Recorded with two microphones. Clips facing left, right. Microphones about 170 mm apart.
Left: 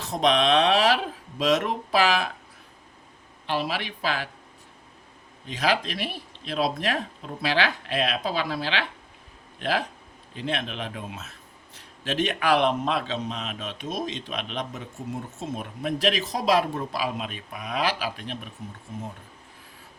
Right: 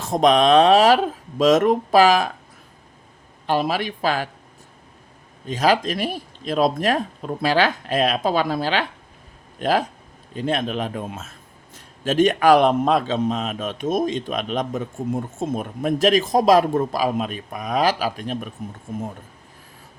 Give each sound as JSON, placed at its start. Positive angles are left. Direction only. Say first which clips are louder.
{"t": 0.0, "sound": "a man's voice", "louder": "right 6 dB", "side_deg": -45}
{"t": 3.4, "sound": "a man's voice", "louder": "right 7 dB", "side_deg": -45}
{"t": 5.5, "sound": "a man's voice", "louder": "right 6 dB", "side_deg": -40}